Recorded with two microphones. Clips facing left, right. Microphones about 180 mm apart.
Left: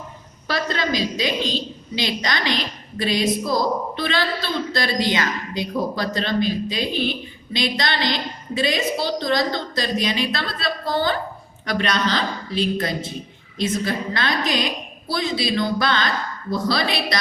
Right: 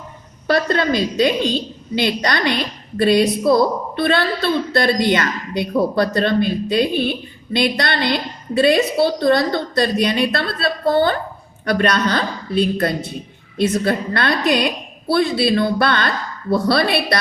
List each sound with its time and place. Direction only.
0.4 s a woman's voice: 55° right (ahead or behind)